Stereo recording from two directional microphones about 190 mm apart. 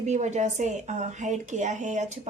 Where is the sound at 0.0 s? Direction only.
35° right (ahead or behind).